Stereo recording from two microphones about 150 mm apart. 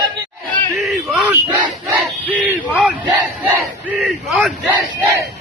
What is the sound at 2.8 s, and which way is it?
Battle cry, 10° right (ahead or behind).